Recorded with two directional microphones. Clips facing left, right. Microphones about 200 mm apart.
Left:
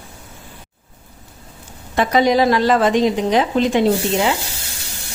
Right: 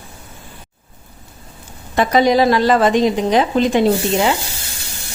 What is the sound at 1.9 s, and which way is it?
A woman's voice, 35° right (ahead or behind).